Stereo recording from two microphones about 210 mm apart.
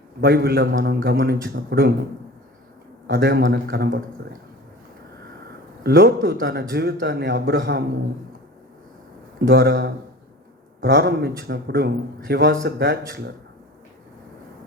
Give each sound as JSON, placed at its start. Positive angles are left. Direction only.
{"t": 0.2, "sound": "a man's voice", "side_deg": -50}
{"t": 3.1, "sound": "a man's voice", "side_deg": -50}
{"t": 5.8, "sound": "a man's voice", "side_deg": -50}
{"t": 9.4, "sound": "a man's voice", "side_deg": -50}